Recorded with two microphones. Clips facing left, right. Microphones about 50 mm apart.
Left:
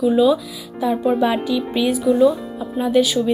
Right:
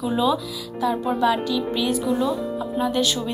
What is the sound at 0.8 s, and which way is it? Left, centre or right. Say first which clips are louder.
A woman's voice: left 4 dB; centre.